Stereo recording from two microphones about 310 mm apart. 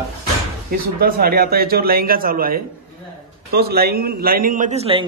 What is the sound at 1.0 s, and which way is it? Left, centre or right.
A man's voice, right.